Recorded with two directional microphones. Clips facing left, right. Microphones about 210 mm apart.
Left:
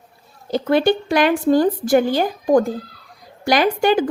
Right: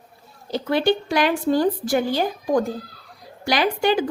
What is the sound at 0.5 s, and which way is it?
A woman's voice, 50° left (ahead or behind).